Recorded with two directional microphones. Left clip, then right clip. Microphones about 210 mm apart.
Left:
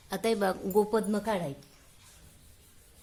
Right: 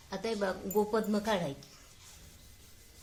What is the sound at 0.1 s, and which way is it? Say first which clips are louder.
Speech: left 5 dB; 45° left (ahead or behind).